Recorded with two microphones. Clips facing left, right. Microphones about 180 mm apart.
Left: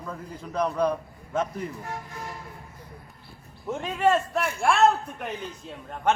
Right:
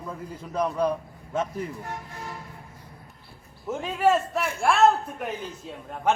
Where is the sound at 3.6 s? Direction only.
Centre (ahead or behind).